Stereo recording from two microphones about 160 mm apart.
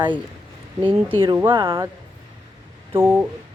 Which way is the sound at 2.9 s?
10° right (ahead or behind).